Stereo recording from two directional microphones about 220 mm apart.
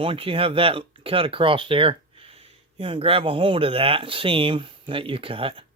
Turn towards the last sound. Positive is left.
turn(degrees=-25)  # may be behind; listen again after turning